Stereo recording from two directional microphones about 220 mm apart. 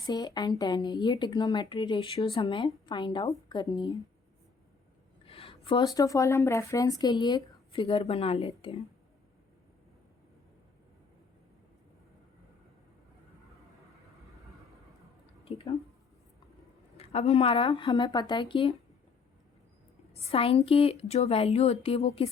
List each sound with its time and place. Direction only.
0.0 s speech: 20° left (ahead or behind)
5.2 s speech: 25° left (ahead or behind)
15.4 s a sound: 25° left (ahead or behind)
17.0 s speech: 30° left (ahead or behind)
20.3 s speech: 25° left (ahead or behind)